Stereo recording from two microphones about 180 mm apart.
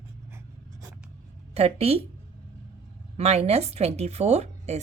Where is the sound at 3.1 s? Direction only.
35° right (ahead or behind).